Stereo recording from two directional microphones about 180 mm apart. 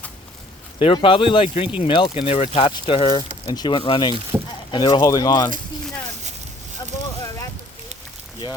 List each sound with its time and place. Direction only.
0.8 s speech: 30° left (ahead or behind)
4.3 s speech: 10° right (ahead or behind)
4.7 s speech: 20° left (ahead or behind)
7.2 s a sound: 15° left (ahead or behind)